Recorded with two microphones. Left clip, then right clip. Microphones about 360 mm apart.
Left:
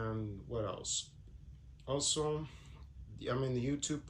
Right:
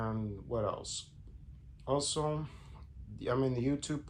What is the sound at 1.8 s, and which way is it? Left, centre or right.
Speech, centre.